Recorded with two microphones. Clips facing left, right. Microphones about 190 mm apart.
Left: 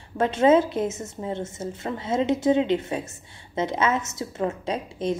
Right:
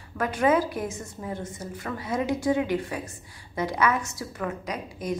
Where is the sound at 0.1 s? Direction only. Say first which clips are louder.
Left 5 dB; 25° left (ahead or behind).